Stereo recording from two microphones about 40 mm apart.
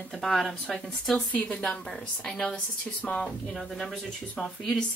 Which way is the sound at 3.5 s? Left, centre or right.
Centre.